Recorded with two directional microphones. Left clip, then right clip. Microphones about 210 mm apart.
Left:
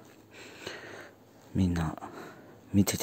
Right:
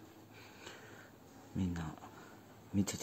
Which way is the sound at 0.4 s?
25° left (ahead or behind).